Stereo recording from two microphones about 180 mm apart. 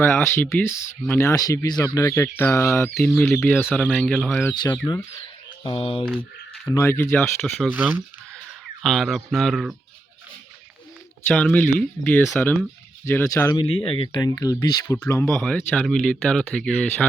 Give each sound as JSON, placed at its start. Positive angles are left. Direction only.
{"t": 0.0, "sound": "speech", "side_deg": 10}
{"t": 4.6, "sound": "speech", "side_deg": 20}
{"t": 5.6, "sound": "speech", "side_deg": 30}
{"t": 6.7, "sound": "speech", "side_deg": 15}
{"t": 7.7, "sound": "speech", "side_deg": -10}
{"t": 8.8, "sound": "speech", "side_deg": 0}
{"t": 11.3, "sound": "speech", "side_deg": 5}
{"t": 13.8, "sound": "speech", "side_deg": 30}